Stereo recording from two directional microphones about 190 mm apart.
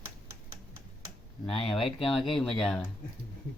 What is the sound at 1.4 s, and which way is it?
Speech, 30° left (ahead or behind).